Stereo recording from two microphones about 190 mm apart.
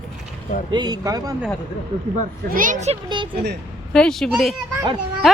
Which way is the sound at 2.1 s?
40° right (ahead or behind).